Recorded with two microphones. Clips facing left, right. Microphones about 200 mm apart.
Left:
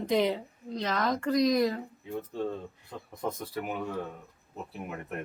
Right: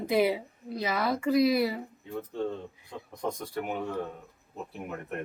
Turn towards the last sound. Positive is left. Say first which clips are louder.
# right 1 dB
turn(degrees=0)  # may be behind; listen again after turning